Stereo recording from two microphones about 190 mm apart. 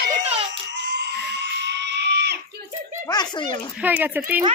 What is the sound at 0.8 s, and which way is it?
Goat, 65° right (ahead or behind).